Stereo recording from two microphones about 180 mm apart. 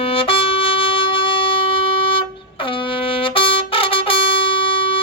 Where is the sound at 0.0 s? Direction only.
30° left (ahead or behind).